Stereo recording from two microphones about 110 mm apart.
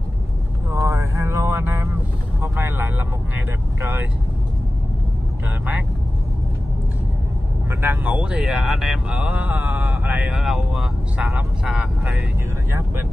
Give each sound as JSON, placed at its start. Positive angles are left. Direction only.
{"t": 0.7, "sound": "vehicle", "side_deg": -25}
{"t": 2.4, "sound": "speech", "side_deg": -20}
{"t": 7.7, "sound": "speech", "side_deg": -20}
{"t": 10.4, "sound": "speech", "side_deg": 0}